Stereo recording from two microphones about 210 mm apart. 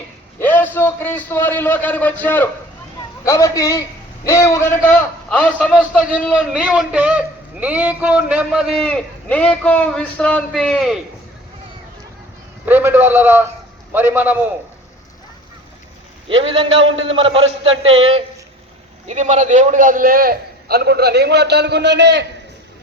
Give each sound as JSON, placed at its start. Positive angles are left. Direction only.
{"t": 0.3, "sound": "a man's voice", "side_deg": 10}
{"t": 12.6, "sound": "a man's voice", "side_deg": -10}
{"t": 16.3, "sound": "a man's voice", "side_deg": -25}